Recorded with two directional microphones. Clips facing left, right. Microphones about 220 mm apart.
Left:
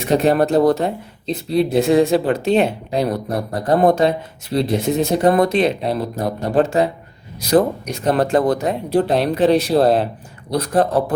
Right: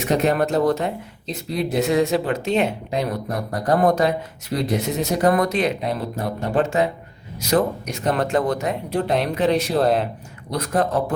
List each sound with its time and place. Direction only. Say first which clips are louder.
0.0 s speech: left 4 dB; 30° left (ahead or behind)
8.1 s speech: left 5 dB; 35° left (ahead or behind)